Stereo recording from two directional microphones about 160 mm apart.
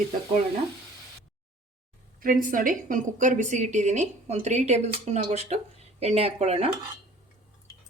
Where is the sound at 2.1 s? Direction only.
60° right (ahead or behind); by 6.7 s 40° right (ahead or behind).